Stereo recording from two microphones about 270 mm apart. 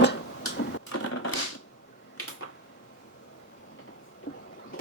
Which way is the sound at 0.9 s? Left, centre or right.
Left.